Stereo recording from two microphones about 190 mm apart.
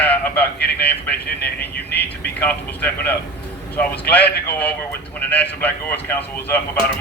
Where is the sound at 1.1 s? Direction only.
60° left (ahead or behind).